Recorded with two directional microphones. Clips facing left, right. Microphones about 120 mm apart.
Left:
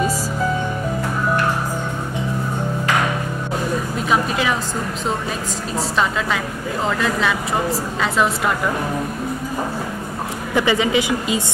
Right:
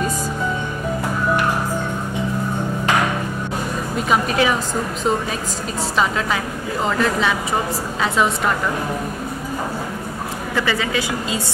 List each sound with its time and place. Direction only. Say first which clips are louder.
4.1 s a woman's voice: right 2 dB; centre (ahead or behind)
5.8 s a woman's voice: even; centre (ahead or behind)
10.5 s a woman's voice: left 4 dB; 15° left (ahead or behind)